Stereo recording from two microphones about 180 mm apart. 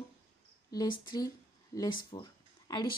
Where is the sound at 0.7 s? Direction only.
20° left (ahead or behind).